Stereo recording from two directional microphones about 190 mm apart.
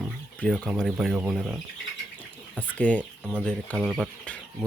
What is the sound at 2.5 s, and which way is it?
Speech, 5° left (ahead or behind).